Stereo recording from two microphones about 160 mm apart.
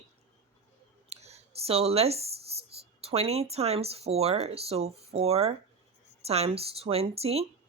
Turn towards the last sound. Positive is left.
turn(degrees=-40)  # may be behind; listen again after turning